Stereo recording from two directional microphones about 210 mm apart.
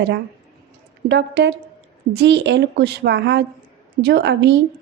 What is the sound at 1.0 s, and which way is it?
A woman's voice, 55° right (ahead or behind).